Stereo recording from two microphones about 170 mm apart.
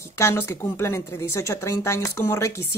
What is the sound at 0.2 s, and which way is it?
A woman's voice, 15° left (ahead or behind).